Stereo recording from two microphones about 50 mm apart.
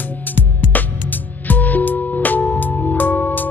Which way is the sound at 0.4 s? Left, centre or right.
Left.